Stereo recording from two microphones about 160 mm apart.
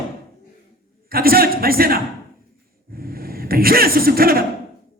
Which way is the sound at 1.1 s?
70° right (ahead or behind).